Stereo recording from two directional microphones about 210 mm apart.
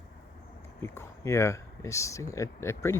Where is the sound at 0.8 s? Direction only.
15° left (ahead or behind).